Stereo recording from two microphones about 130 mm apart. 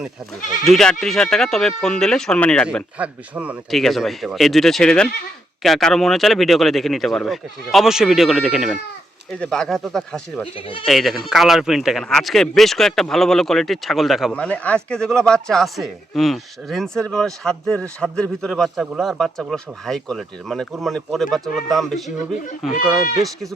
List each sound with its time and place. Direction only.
0.6 s speech: 5° left (ahead or behind)
3.0 s speech: 10° right (ahead or behind)
3.7 s speech: centre (ahead or behind)
9.3 s speech: 5° left (ahead or behind)
10.4 s speech: 45° left (ahead or behind)
10.8 s speech: centre (ahead or behind)
14.3 s speech: 10° left (ahead or behind)